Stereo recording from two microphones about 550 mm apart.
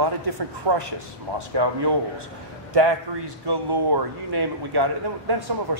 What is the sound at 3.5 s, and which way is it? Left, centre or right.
Speech, right.